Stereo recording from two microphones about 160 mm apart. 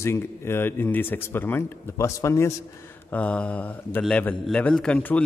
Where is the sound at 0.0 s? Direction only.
15° left (ahead or behind).